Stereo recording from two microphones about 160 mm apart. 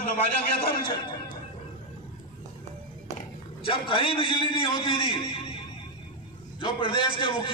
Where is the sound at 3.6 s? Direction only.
35° left (ahead or behind).